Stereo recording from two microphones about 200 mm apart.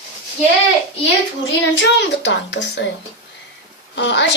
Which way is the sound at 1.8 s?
60° left (ahead or behind).